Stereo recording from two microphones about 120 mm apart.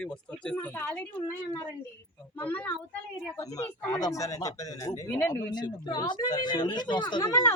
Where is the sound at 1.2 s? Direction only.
30° left (ahead or behind).